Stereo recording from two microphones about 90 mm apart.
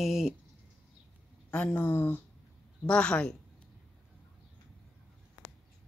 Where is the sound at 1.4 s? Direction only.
15° left (ahead or behind).